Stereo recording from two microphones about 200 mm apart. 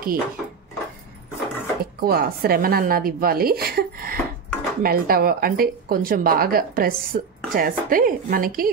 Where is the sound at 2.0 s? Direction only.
50° right (ahead or behind).